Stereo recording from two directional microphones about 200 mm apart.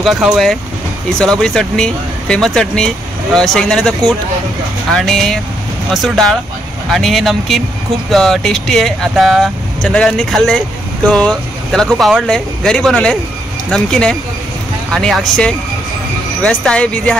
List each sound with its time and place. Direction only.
0.0 s speech: centre (ahead or behind)